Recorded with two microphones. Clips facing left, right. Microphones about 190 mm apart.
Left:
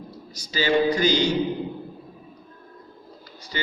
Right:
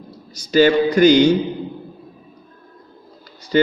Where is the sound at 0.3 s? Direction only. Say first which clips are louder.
Right 8 dB; 60° right (ahead or behind).